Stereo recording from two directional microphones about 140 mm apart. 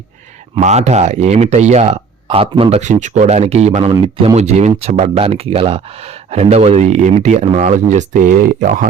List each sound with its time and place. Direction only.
0.6 s speech: 55° right (ahead or behind)
2.2 s speech: 40° right (ahead or behind); by 8.4 s 65° right (ahead or behind)